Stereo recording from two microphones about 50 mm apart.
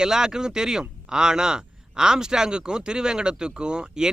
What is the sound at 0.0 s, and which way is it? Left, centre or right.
Speech, centre.